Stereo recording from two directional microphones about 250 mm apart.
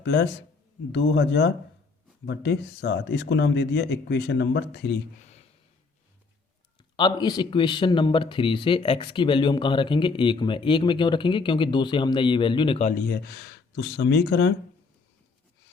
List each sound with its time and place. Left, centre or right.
0.0 s a man's voice: left
6.9 s speech: centre
12.9 s speech: left